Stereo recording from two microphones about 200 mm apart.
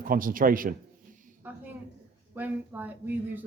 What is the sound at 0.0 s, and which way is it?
Speech, 45° right (ahead or behind).